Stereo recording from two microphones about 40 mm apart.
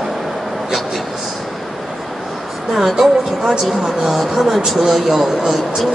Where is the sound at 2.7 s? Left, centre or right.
Centre.